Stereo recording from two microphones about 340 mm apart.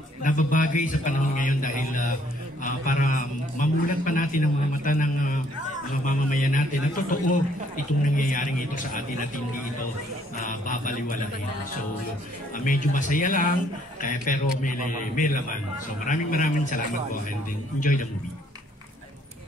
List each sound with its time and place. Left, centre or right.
0.2 s a man's voice: left
10.3 s a man's voice: left
12.5 s a man's voice: left